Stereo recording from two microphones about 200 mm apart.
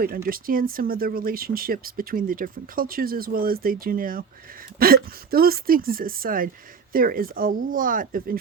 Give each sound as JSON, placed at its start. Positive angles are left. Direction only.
{"t": 0.3, "sound": "speech", "side_deg": -45}